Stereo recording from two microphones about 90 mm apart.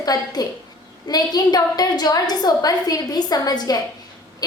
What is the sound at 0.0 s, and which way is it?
A woman's voice, 45° left (ahead or behind).